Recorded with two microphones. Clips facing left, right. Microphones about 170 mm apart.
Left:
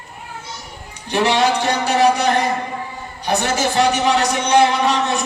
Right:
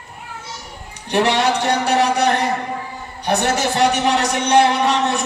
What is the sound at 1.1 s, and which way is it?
A man's voice, 65° right (ahead or behind).